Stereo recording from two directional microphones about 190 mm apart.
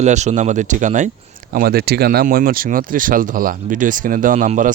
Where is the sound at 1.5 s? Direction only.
55° right (ahead or behind).